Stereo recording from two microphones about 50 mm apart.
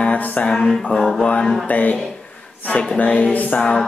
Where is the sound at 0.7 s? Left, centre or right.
Centre.